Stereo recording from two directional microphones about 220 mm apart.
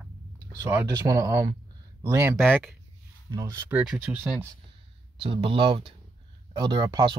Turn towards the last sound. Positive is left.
turn(degrees=-20)  # may be behind; listen again after turning